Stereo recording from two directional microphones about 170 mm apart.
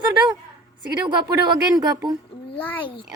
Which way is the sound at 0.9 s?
25° right (ahead or behind).